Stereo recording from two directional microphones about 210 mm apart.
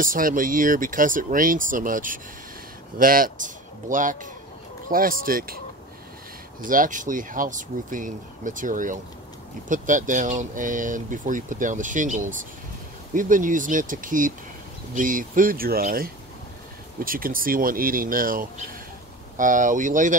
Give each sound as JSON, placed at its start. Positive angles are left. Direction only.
{"t": 0.0, "sound": "speech", "side_deg": -40}
{"t": 6.6, "sound": "speech", "side_deg": -40}